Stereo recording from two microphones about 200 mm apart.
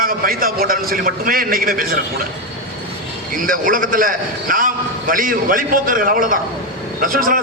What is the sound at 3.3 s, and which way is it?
A man's voice, 45° right (ahead or behind).